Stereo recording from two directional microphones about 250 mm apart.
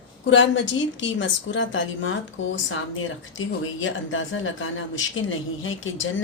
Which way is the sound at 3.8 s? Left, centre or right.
Left.